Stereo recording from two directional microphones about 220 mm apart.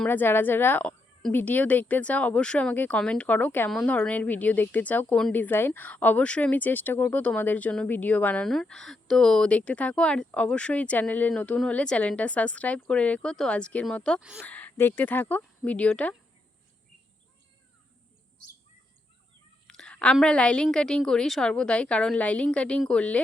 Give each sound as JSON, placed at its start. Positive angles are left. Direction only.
{"t": 0.0, "sound": "a woman's voice", "side_deg": 10}
{"t": 14.4, "sound": "speech", "side_deg": 5}
{"t": 19.6, "sound": "a woman's voice", "side_deg": 5}